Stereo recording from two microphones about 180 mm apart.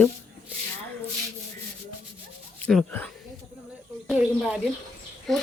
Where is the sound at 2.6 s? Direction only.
10° left (ahead or behind).